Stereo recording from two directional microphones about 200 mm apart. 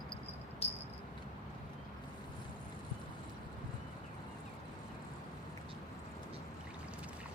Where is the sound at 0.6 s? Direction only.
30° left (ahead or behind).